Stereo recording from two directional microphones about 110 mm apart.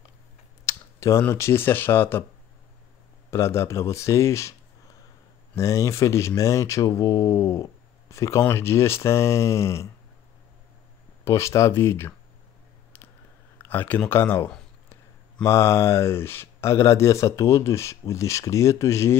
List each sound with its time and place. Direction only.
0.7 s a sound: 30° left (ahead or behind)
1.3 s speech: 25° left (ahead or behind)
3.3 s speech: 25° left (ahead or behind)
5.6 s speech: 25° left (ahead or behind)
11.2 s speech: 25° left (ahead or behind)
13.6 s speech: 15° left (ahead or behind)